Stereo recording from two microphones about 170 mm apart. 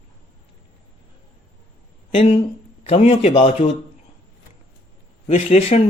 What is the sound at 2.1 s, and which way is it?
Speech, 35° left (ahead or behind).